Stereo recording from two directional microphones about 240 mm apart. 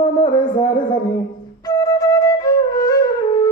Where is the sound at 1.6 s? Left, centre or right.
Centre.